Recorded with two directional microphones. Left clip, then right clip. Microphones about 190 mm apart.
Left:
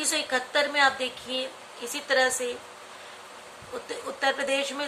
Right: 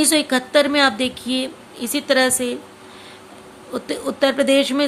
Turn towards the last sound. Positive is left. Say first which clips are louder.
# right 11 dB
turn(degrees=-45)  # may be behind; listen again after turning